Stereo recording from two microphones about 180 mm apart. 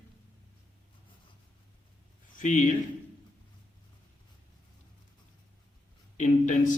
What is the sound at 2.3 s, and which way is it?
Speech, 45° left (ahead or behind).